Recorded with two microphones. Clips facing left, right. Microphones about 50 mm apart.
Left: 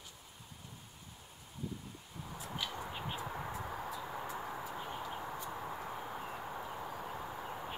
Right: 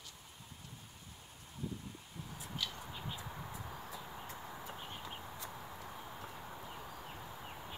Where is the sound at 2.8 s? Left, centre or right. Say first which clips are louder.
Left 5 dB; left.